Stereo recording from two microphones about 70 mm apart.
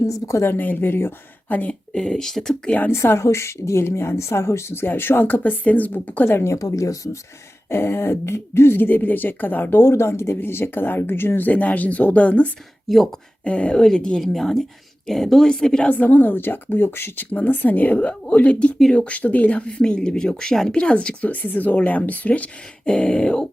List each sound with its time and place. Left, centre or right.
0.1 s a woman's voice: left
0.4 s speech: left
1.5 s speech: left
1.9 s speech: centre
2.6 s speech: left
2.9 s speech: left
7.7 s speech: left
12.9 s speech: centre
13.4 s speech: centre
15.9 s speech: left